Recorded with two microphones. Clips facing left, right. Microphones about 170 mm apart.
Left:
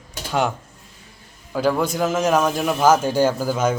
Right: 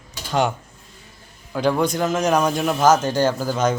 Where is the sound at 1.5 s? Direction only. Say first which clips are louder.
Even; 5° left (ahead or behind).